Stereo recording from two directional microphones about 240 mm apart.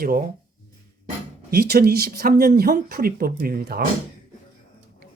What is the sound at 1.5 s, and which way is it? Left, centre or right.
Speech, right.